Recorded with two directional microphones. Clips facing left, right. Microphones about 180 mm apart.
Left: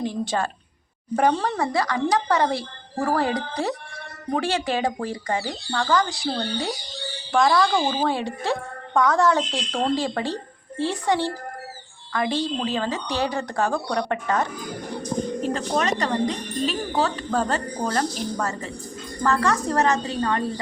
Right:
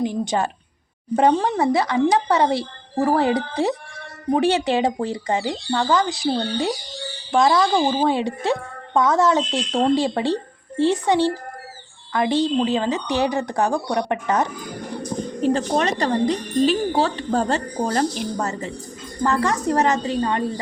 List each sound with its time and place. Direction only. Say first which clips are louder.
0.0 s a woman's voice: right 3 dB; 15° right (ahead or behind)
7.3 s a woman's voice: right 2 dB; 20° right (ahead or behind)
15.5 s a woman's voice: right 3 dB; 30° right (ahead or behind)